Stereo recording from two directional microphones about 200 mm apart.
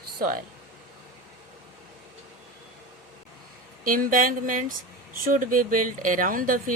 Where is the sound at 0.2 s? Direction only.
45° right (ahead or behind).